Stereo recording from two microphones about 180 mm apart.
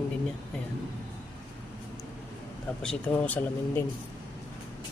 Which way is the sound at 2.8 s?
10° left (ahead or behind).